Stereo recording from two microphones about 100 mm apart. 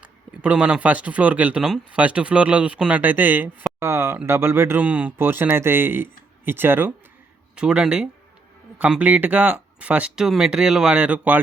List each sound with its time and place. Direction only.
0.0 s speech: 15° right (ahead or behind)
7.5 s speech: 10° right (ahead or behind)